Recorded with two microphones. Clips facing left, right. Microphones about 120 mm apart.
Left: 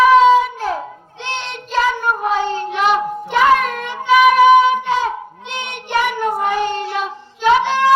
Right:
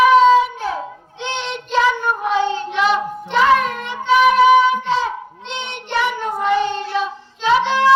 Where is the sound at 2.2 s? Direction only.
40° left (ahead or behind).